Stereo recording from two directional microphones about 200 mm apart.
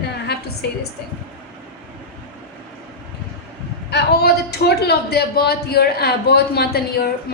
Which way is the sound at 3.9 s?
55° left (ahead or behind).